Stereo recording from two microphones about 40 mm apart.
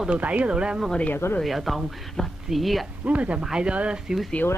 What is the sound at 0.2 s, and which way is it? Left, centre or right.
Speech, right.